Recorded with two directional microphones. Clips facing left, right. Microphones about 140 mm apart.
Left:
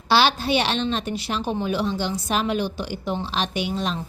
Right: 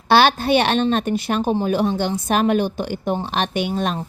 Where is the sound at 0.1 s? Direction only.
55° right (ahead or behind).